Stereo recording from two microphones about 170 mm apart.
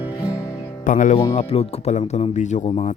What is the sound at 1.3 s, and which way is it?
Speech, 35° left (ahead or behind).